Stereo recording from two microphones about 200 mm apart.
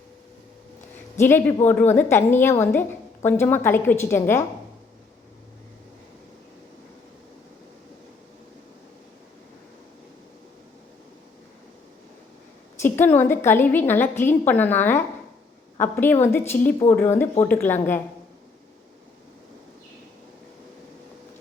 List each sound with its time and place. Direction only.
1.2 s a woman's voice: 10° left (ahead or behind)
12.8 s a woman's voice: 10° left (ahead or behind)